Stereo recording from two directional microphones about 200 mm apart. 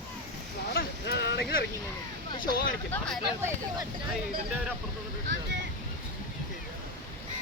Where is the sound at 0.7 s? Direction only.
55° left (ahead or behind).